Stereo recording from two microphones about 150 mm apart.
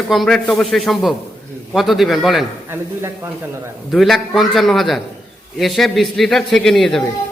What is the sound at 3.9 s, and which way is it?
A man's voice, centre (ahead or behind).